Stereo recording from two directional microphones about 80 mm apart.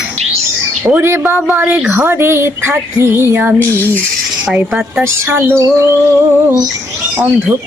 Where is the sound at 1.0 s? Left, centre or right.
Right.